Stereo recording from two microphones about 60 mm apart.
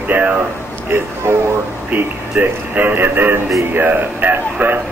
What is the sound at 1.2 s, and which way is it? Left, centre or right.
Speech, right.